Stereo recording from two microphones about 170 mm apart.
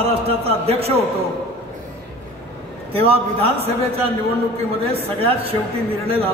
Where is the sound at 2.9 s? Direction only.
35° right (ahead or behind).